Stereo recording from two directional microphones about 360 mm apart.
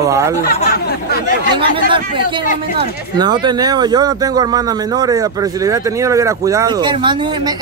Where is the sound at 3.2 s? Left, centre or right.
Centre.